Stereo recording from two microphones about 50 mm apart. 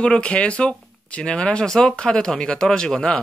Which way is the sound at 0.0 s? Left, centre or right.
Left.